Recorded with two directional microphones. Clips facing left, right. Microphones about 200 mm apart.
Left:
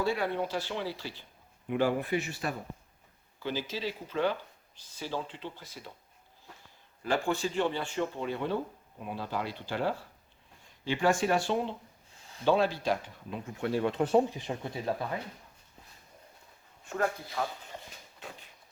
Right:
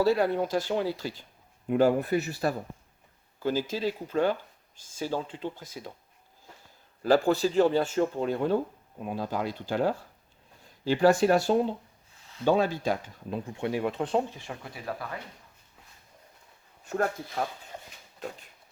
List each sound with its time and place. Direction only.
0.0 s speech: 40° right (ahead or behind)
7.0 s speech: 35° right (ahead or behind)
13.8 s speech: centre (ahead or behind)
14.3 s speech: 20° left (ahead or behind)
16.8 s speech: 40° right (ahead or behind)